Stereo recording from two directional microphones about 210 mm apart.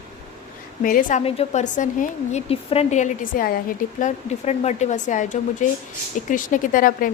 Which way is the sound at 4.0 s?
30° left (ahead or behind).